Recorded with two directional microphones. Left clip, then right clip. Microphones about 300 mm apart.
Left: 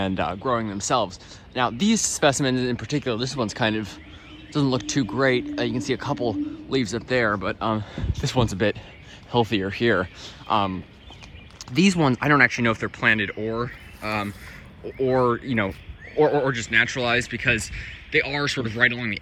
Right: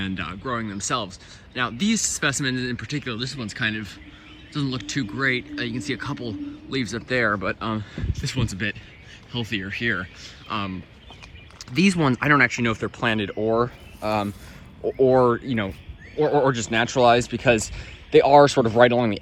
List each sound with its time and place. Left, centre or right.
0.0 s speech: centre
13.2 s speech: centre
16.7 s speech: centre